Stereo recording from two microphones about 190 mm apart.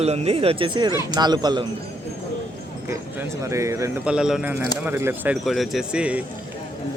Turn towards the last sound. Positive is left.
turn(degrees=-5)  # may be behind; listen again after turning